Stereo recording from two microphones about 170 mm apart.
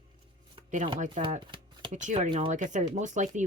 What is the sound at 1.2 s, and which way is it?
Speech, 30° right (ahead or behind).